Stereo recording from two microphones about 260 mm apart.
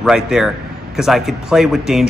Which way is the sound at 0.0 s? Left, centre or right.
Centre.